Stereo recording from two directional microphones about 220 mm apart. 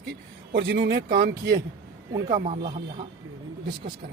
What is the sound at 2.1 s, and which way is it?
Speech, 20° right (ahead or behind).